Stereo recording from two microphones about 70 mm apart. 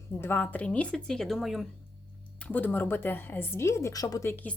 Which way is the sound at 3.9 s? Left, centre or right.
Left.